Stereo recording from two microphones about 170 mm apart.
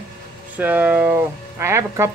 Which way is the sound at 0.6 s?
10° right (ahead or behind).